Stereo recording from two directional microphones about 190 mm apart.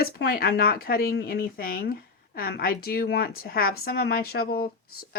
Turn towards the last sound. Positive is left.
turn(degrees=55)  # may be behind; listen again after turning